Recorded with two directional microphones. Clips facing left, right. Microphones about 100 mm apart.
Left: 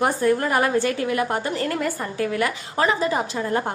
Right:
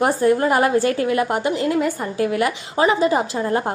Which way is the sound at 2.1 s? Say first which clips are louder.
Right 4 dB; 25° right (ahead or behind).